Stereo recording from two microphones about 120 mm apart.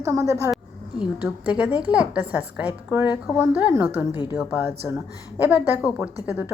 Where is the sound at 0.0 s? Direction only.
25° right (ahead or behind).